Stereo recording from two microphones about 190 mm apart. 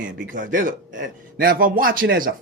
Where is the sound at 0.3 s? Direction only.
45° right (ahead or behind).